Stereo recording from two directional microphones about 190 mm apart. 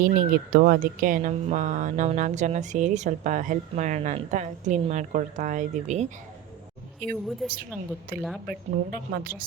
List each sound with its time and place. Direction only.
0.0 s speech: 45° right (ahead or behind)
7.4 s a woman's voice: centre (ahead or behind)
8.1 s a woman's voice: 50° right (ahead or behind)